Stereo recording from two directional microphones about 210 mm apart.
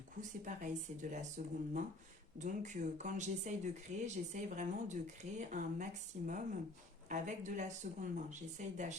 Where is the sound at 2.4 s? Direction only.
35° right (ahead or behind).